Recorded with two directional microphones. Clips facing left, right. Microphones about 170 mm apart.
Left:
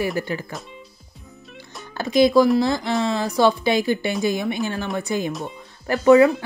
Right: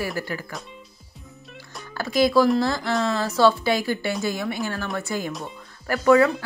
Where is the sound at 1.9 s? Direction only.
20° left (ahead or behind).